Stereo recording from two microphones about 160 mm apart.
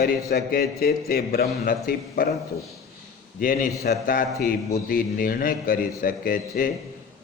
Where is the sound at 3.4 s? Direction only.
60° left (ahead or behind).